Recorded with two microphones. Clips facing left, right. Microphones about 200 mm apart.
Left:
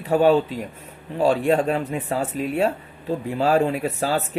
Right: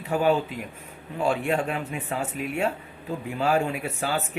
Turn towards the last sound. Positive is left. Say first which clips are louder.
# left 5 dB
turn(degrees=35)  # may be behind; listen again after turning